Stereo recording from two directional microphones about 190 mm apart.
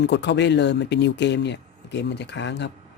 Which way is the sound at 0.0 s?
65° left (ahead or behind).